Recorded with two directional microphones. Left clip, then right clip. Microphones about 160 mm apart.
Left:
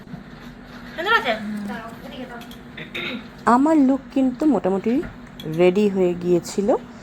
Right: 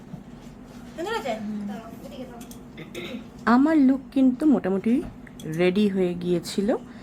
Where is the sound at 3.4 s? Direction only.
Centre (ahead or behind).